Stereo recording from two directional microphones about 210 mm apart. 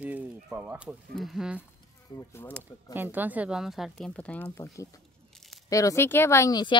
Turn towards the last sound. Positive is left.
turn(degrees=20)  # may be behind; listen again after turning